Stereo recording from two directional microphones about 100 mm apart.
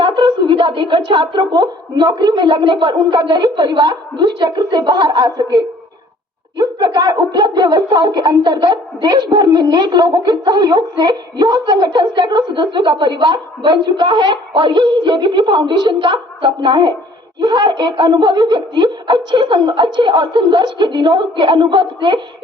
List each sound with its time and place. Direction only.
0.0 s speech: 55° right (ahead or behind)